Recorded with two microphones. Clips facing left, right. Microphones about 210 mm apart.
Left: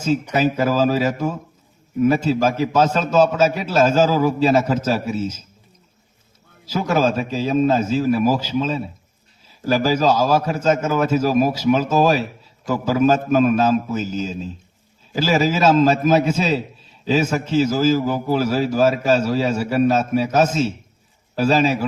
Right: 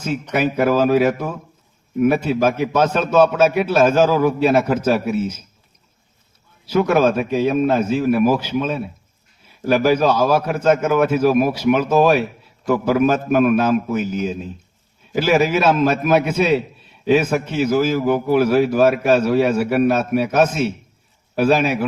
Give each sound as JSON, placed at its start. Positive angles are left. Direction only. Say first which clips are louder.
{"t": 0.3, "sound": "a man's voice", "louder": "right 3 dB", "side_deg": -60}
{"t": 6.7, "sound": "a man's voice", "louder": "right 4 dB", "side_deg": -60}